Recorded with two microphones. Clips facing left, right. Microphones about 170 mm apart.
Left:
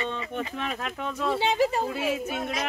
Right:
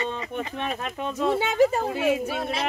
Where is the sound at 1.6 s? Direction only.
45° right (ahead or behind).